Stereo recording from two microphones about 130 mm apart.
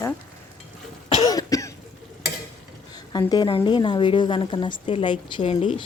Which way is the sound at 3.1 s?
30° left (ahead or behind).